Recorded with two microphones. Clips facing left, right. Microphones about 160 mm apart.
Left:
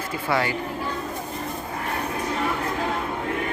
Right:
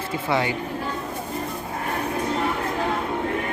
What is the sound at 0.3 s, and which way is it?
Speech, 20° right (ahead or behind).